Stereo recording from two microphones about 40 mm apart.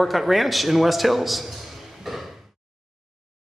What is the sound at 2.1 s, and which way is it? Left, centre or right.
Door, centre.